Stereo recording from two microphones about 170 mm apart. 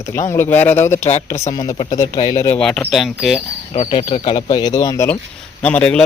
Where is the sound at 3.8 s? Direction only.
30° left (ahead or behind); by 6.0 s 5° left (ahead or behind).